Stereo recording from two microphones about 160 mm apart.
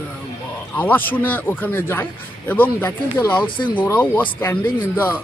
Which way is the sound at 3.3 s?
30° left (ahead or behind).